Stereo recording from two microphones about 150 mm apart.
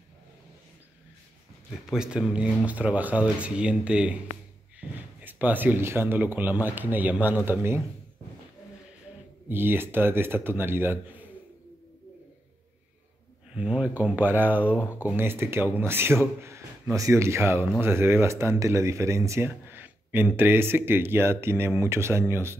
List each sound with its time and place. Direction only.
1.9 s speech: 5° right (ahead or behind)
9.5 s speech: 15° right (ahead or behind)
13.6 s speech: 10° right (ahead or behind)